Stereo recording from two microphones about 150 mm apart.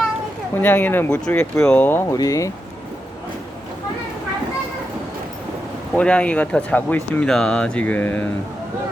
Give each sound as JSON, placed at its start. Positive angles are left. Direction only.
{"t": 0.5, "sound": "speech", "side_deg": 15}
{"t": 5.9, "sound": "speech", "side_deg": 10}